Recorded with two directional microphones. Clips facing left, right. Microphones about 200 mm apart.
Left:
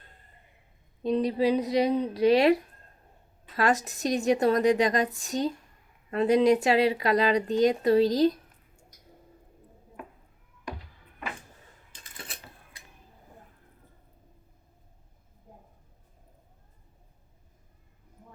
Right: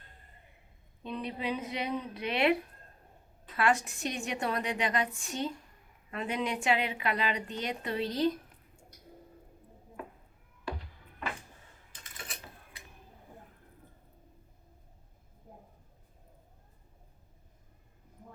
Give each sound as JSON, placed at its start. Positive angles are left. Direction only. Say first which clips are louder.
{"t": 1.0, "sound": "a woman's voice", "louder": "left 11 dB", "side_deg": 35}